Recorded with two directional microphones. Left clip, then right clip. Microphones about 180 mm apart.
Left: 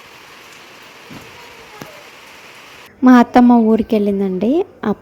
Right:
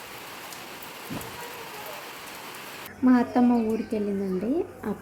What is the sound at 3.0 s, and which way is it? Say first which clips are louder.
A woman's voice: left 12 dB; 50° left (ahead or behind).